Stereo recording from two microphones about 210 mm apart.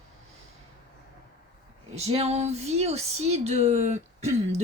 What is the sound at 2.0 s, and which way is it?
Speech, 30° right (ahead or behind).